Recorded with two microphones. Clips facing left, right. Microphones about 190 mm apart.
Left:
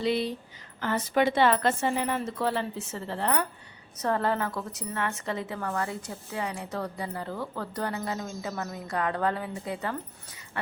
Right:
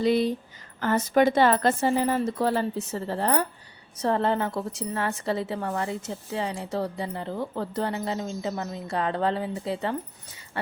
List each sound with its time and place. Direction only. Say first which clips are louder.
0.0 s speech: right 5 dB; 45° right (ahead or behind)
4.0 s a woman's voice: right 3 dB; 25° right (ahead or behind)